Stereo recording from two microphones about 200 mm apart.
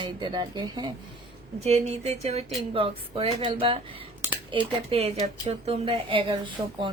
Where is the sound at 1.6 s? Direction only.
30° right (ahead or behind).